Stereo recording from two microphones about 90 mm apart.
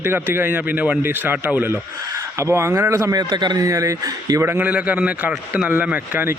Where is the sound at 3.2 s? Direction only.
55° right (ahead or behind).